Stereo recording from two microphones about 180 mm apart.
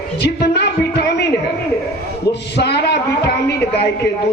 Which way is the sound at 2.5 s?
65° left (ahead or behind).